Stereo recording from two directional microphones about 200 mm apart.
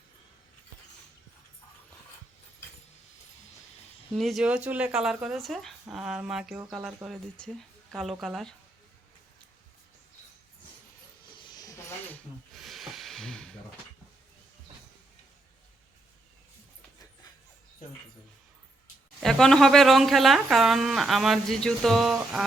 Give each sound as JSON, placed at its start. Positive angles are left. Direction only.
{"t": 4.1, "sound": "speech", "side_deg": 0}
{"t": 11.3, "sound": "a sound", "side_deg": 20}
{"t": 12.5, "sound": "hiss", "side_deg": 0}
{"t": 19.2, "sound": "speech", "side_deg": 0}